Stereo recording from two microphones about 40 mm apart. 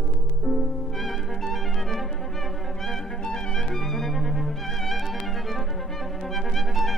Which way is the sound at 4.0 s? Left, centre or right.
Centre.